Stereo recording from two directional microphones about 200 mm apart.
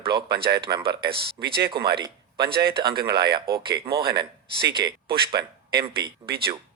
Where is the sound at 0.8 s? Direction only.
50° right (ahead or behind).